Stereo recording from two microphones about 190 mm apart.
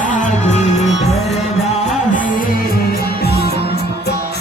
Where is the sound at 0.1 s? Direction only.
40° left (ahead or behind).